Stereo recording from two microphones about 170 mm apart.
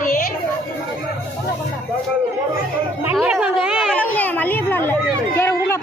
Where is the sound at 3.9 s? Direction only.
10° left (ahead or behind).